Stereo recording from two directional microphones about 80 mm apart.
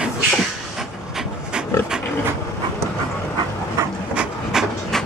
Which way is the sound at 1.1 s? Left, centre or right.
Centre.